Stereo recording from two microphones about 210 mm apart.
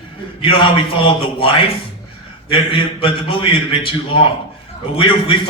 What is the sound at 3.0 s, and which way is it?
A man's voice, 25° left (ahead or behind).